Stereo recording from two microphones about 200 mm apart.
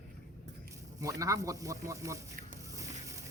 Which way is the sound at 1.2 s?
15° right (ahead or behind).